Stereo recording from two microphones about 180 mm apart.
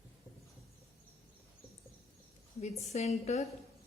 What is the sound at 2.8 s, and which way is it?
Speech, 35° left (ahead or behind).